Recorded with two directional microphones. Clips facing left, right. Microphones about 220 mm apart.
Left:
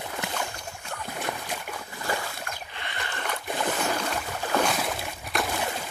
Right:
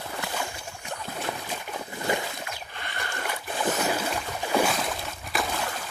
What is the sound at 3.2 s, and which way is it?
Boat, 10° right (ahead or behind).